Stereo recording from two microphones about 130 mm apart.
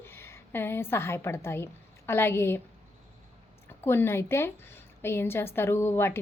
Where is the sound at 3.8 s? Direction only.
20° left (ahead or behind).